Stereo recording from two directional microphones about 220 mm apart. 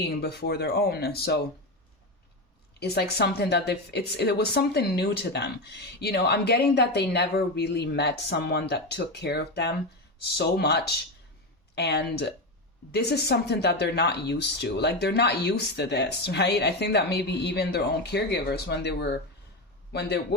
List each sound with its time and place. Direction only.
0.0 s a woman's voice: 50° left (ahead or behind)
2.8 s a woman's voice: 50° left (ahead or behind)